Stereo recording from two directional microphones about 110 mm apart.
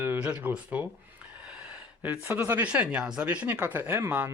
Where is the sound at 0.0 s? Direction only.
15° right (ahead or behind).